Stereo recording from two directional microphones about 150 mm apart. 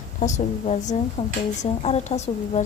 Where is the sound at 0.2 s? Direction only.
55° left (ahead or behind).